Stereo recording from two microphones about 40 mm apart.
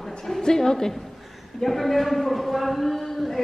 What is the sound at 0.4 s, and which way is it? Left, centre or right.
A woman's voice, centre.